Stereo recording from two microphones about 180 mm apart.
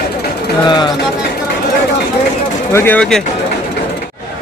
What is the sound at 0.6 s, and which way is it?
Speech, 25° left (ahead or behind).